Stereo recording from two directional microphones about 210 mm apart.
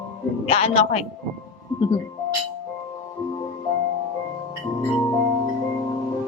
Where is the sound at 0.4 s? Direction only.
30° left (ahead or behind).